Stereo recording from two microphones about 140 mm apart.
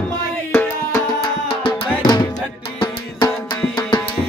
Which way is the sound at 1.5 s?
35° left (ahead or behind).